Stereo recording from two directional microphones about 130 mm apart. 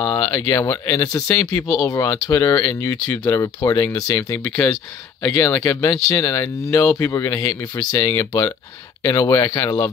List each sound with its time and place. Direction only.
0.0 s speech: 30° left (ahead or behind)